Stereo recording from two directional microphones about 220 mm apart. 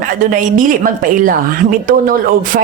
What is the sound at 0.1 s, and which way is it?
A woman's voice, 40° right (ahead or behind).